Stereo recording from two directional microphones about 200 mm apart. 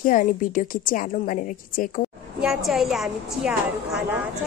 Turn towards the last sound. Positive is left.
turn(degrees=-5)  # may be behind; listen again after turning